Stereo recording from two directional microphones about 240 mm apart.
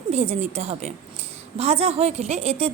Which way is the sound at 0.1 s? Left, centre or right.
Right.